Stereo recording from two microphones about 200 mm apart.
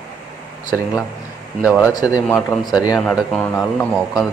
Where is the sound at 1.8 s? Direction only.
20° left (ahead or behind).